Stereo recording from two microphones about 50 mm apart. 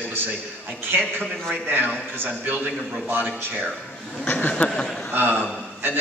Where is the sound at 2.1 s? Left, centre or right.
Right.